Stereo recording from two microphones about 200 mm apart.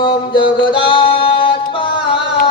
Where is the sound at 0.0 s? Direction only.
25° left (ahead or behind).